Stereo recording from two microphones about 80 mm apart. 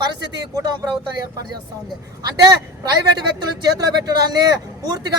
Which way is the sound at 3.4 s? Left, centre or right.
Right.